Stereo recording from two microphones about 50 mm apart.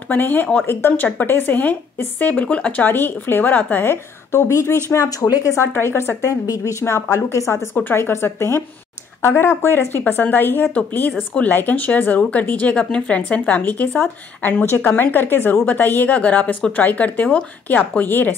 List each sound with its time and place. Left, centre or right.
0.1 s a woman's voice: left
2.0 s speech: left
2.8 s a woman's voice: left
5.8 s a woman's voice: left
7.7 s a woman's voice: left
8.0 s a woman's voice: left
12.7 s a woman's voice: left